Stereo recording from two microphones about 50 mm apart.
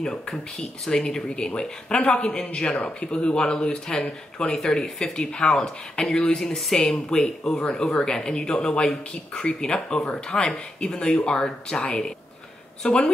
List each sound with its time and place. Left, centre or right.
0.0 s speech: centre
12.8 s speech: left